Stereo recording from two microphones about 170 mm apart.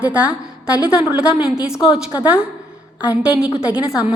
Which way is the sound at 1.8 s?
30° left (ahead or behind).